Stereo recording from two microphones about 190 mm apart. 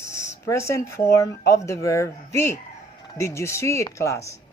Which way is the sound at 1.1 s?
15° left (ahead or behind).